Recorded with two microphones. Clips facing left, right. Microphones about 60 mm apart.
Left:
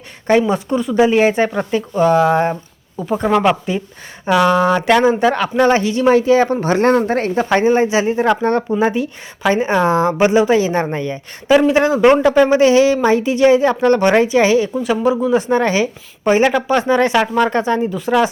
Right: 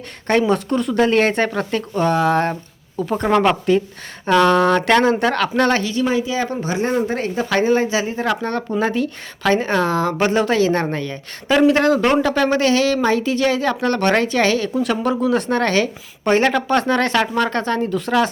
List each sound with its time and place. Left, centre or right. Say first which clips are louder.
0.3 s a woman's voice: left 3 dB; centre
5.8 s speech: left 3 dB; left
6.1 s speech: left 8 dB; left
7.1 s speech: left 5 dB; left
7.5 s speech: left 3 dB; left
8.8 s a woman's voice: left 3 dB; centre